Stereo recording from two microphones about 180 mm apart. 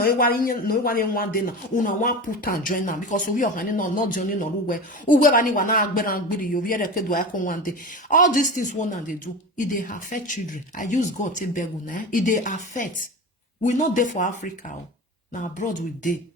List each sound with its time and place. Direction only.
0.0 s a man's voice: 55° left (ahead or behind)